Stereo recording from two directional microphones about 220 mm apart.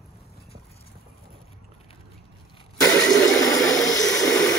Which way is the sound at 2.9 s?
5° left (ahead or behind).